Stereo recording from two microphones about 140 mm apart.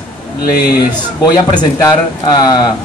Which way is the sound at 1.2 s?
30° left (ahead or behind).